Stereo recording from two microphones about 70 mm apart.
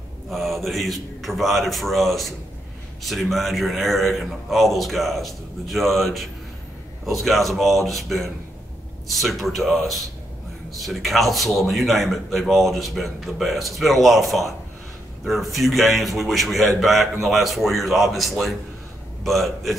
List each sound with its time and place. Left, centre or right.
0.3 s a man's voice: centre